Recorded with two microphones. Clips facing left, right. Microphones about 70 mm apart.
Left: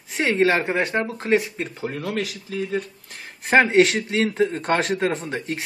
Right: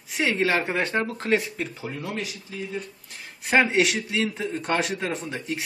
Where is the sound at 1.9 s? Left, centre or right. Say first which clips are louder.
Left 5 dB; left.